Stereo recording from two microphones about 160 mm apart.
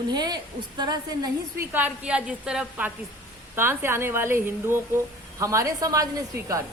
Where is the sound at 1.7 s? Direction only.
10° right (ahead or behind).